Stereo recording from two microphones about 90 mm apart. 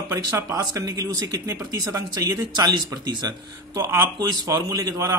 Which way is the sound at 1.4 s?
35° right (ahead or behind).